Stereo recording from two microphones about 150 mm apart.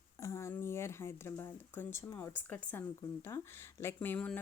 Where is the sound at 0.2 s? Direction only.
20° left (ahead or behind).